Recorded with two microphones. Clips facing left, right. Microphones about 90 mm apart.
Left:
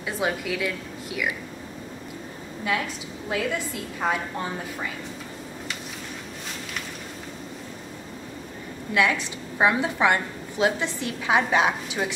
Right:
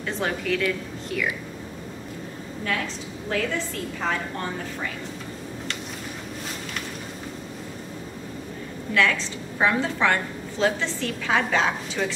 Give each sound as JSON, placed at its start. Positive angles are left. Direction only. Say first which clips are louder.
{"t": 0.0, "sound": "a woman's voice", "louder": "even", "side_deg": 10}
{"t": 3.3, "sound": "a woman's voice", "louder": "even", "side_deg": 10}
{"t": 8.9, "sound": "a woman's voice", "louder": "even", "side_deg": 15}